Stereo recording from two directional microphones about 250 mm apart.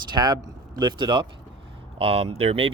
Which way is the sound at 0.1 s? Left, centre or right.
Centre.